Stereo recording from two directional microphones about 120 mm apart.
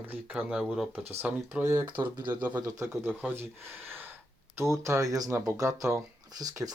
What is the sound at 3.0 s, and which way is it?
Speech, 15° right (ahead or behind).